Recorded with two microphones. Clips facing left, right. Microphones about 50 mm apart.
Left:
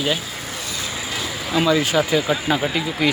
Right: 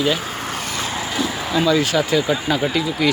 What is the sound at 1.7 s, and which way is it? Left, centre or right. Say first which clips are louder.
Speech: even; centre.